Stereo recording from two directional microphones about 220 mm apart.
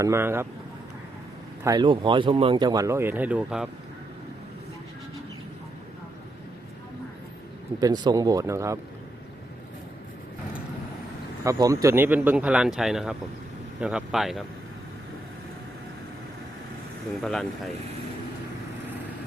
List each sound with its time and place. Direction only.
0.0 s speech: 10° right (ahead or behind)
1.6 s speech: 20° right (ahead or behind)
7.8 s speech: 15° right (ahead or behind)
11.4 s speech: 15° right (ahead or behind)
17.2 s speech: centre (ahead or behind)